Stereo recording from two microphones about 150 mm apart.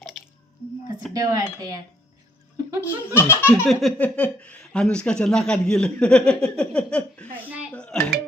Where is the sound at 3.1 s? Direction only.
15° left (ahead or behind).